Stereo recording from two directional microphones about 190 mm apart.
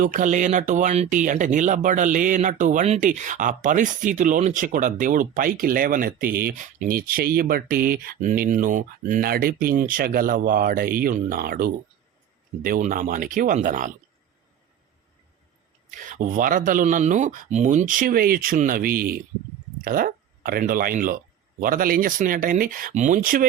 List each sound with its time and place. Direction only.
0.0 s speech: 45° right (ahead or behind)
16.0 s speech: 45° right (ahead or behind)